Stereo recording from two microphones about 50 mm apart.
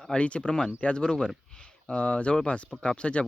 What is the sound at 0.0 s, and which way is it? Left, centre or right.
Speech, left.